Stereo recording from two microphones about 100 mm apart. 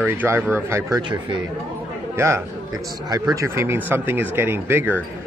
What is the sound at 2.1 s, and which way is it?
A man's voice, 25° right (ahead or behind).